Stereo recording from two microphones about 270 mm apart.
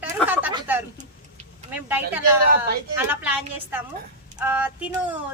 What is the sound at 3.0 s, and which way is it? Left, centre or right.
Speech, centre.